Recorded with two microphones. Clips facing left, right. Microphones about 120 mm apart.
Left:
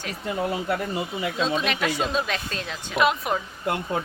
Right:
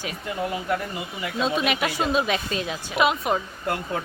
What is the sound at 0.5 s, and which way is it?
Speech, 30° left (ahead or behind).